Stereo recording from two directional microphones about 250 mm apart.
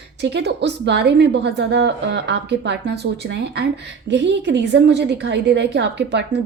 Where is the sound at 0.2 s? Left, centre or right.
Right.